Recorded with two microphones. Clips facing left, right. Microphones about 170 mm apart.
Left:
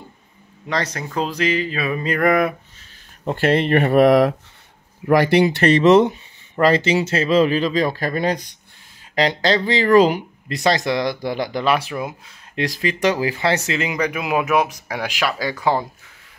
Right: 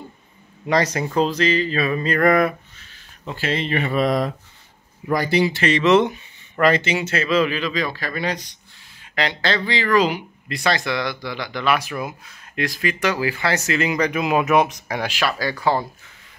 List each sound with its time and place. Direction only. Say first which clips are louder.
0.7 s speech: right 4 dB; 10° right (ahead or behind)
1.1 s speech: right 1 dB; 10° left (ahead or behind)
3.3 s speech: left 7 dB; 60° left (ahead or behind)
6.0 s speech: left 3 dB; 30° left (ahead or behind)
12.6 s speech: left 3 dB; 35° left (ahead or behind); by 15.9 s 15° left (ahead or behind)